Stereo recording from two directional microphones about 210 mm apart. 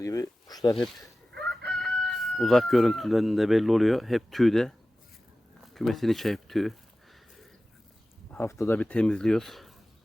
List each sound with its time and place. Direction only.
0.0 s speech: 15° left (ahead or behind)
1.4 s speech: 5° left (ahead or behind)
5.7 s speech: centre (ahead or behind)
8.3 s speech: 10° left (ahead or behind)